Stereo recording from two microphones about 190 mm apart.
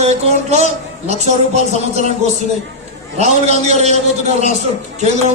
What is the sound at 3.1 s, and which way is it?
A man's voice, 35° right (ahead or behind).